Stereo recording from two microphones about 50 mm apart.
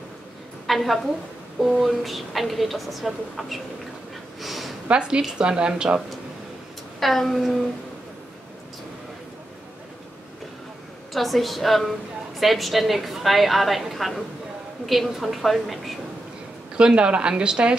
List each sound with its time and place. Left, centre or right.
0.7 s a woman's voice: centre
4.4 s a sound: centre
4.8 s a woman's voice: centre
7.0 s a woman's voice: centre
11.1 s a woman's voice: centre
16.7 s a woman's voice: right